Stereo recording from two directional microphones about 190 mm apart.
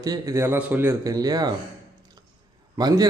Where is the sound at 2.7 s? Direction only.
20° right (ahead or behind).